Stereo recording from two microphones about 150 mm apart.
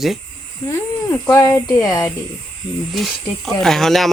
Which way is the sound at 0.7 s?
20° left (ahead or behind).